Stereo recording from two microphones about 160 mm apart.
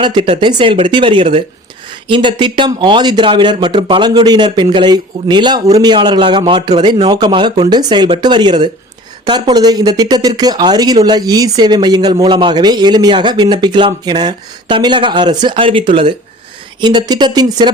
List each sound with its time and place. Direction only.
0.0 s speech: 30° right (ahead or behind)